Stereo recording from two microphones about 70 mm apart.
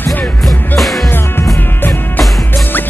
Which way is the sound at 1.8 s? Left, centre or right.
Left.